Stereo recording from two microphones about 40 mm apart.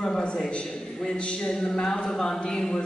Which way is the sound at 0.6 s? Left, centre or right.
Centre.